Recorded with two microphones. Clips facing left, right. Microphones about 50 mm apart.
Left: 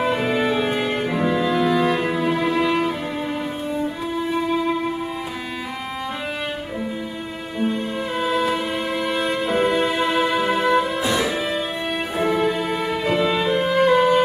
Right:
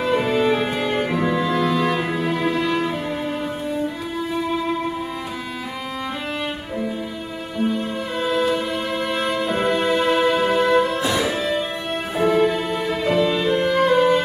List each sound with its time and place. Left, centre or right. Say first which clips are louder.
0.2 s music: right 1 dB; centre
2.5 s music: left 2 dB; centre
7.6 s music: even; centre
12.4 s music: right 2 dB; centre